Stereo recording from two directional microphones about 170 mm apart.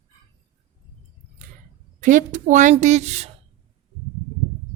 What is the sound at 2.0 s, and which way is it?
A woman's voice, 50° right (ahead or behind).